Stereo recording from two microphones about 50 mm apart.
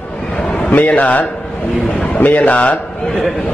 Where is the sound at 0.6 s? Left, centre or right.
Left.